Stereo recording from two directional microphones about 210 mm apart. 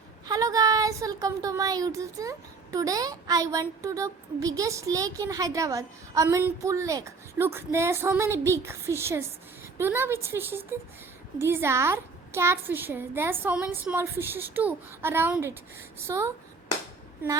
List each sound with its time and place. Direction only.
0.3 s a woman's voice: 15° right (ahead or behind)